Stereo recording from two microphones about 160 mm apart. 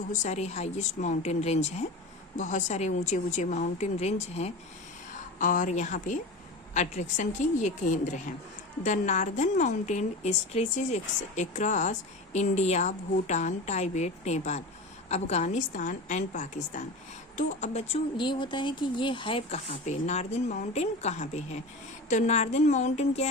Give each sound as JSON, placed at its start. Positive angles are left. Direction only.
{"t": 0.1, "sound": "a woman's voice", "side_deg": 45}
{"t": 5.4, "sound": "a woman's voice", "side_deg": 55}